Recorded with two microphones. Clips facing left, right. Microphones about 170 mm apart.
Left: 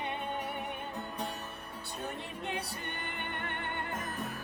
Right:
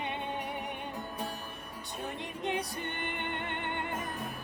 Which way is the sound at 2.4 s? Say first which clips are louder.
Right 6 dB; 20° right (ahead or behind).